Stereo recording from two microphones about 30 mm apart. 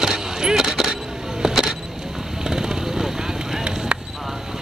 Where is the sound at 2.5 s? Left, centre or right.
Right.